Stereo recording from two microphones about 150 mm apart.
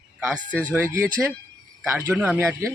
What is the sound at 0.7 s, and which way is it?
Speech, 15° right (ahead or behind).